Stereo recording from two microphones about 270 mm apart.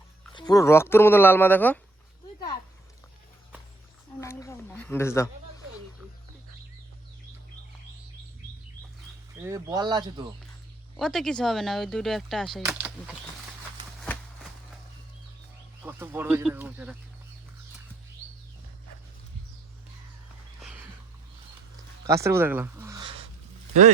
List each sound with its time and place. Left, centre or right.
0.3 s speech: centre
4.2 s speech: centre
9.4 s speech: centre
10.9 s speech: centre
15.8 s speech: centre
20.6 s a sound: centre
22.0 s speech: centre